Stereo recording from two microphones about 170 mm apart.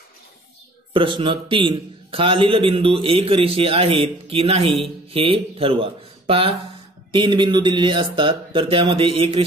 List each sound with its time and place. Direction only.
0.9 s a man's voice: 30° right (ahead or behind)